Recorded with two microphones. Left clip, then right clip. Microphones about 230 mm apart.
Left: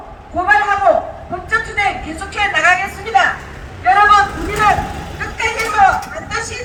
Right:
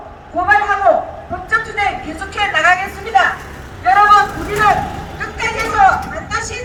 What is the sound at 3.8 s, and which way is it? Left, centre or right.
Vehicle, centre.